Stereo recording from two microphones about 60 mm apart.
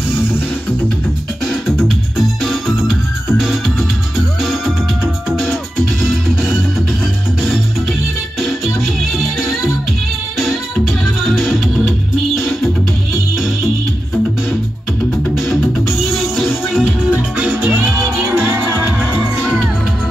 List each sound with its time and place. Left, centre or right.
1.5 s music: centre
8.4 s music: centre
11.2 s music: centre
15.5 s music: centre
17.1 s music: right
18.2 s music: right